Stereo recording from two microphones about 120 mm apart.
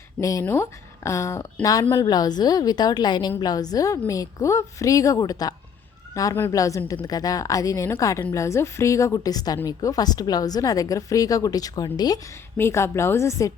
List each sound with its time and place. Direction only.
0.2 s a woman's voice: 25° left (ahead or behind)
0.4 s a woman's voice: 15° left (ahead or behind)
1.8 s a woman's voice: 35° left (ahead or behind)